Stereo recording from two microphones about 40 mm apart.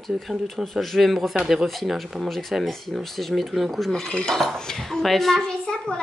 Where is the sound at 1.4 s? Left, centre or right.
Centre.